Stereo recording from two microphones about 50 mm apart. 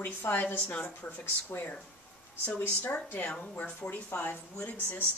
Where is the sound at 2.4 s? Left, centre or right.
Left.